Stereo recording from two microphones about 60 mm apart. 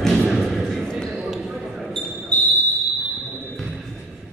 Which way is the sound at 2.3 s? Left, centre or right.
Left.